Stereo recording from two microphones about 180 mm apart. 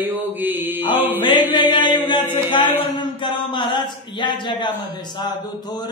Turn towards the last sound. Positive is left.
turn(degrees=20)  # may be behind; listen again after turning